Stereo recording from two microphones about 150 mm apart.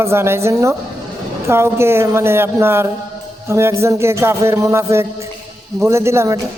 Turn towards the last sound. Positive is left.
turn(degrees=-20)  # may be behind; listen again after turning